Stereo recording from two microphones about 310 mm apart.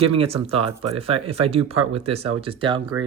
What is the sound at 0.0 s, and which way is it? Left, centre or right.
Speech, centre.